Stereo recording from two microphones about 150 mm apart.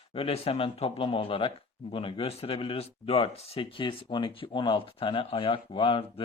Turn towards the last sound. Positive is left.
turn(degrees=40)  # may be behind; listen again after turning